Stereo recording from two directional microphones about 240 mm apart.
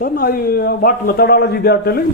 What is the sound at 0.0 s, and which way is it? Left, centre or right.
A man's voice, left.